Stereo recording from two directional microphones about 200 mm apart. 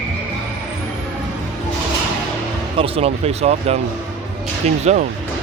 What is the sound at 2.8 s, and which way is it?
Speech, 30° right (ahead or behind).